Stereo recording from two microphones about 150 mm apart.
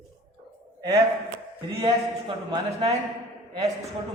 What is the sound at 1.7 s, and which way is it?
A man's voice, 30° right (ahead or behind).